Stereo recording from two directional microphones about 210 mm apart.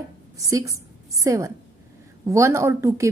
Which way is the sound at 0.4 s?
15° right (ahead or behind).